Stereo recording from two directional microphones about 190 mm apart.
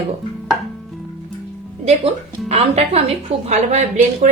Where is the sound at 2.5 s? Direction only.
35° right (ahead or behind).